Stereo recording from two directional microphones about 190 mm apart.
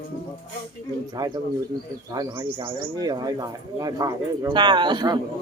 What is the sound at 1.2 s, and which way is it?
A woman's voice, 20° right (ahead or behind).